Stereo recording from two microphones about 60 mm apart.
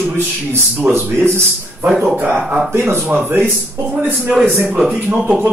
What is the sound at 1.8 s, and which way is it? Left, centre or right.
Speech, right.